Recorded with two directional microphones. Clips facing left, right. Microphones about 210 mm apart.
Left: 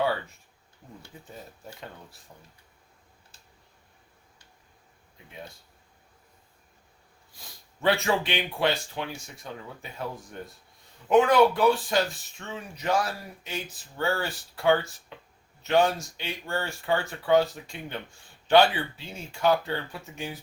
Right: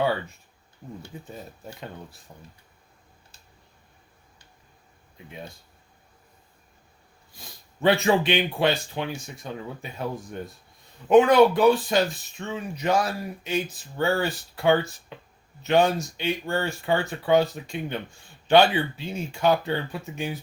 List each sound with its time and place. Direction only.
1.1 s speech: 20° right (ahead or behind)
2.3 s speech: 35° right (ahead or behind)
7.8 s speech: 20° right (ahead or behind)